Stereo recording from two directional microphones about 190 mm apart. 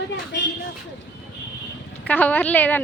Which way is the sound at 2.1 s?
10° left (ahead or behind).